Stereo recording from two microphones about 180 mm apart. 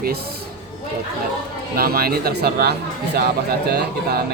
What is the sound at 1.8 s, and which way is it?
Speech, 55° right (ahead or behind).